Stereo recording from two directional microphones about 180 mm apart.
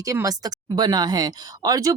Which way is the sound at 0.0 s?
20° right (ahead or behind).